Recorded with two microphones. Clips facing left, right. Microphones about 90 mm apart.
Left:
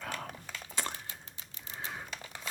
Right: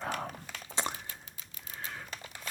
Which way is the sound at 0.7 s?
25° right (ahead or behind).